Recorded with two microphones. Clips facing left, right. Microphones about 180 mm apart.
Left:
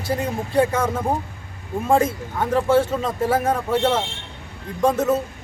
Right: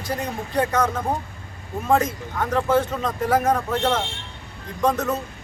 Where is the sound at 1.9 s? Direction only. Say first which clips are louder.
Left 2 dB; 30° left (ahead or behind).